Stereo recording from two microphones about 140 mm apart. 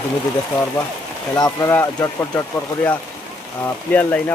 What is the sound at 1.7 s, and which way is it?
Speech, 20° left (ahead or behind).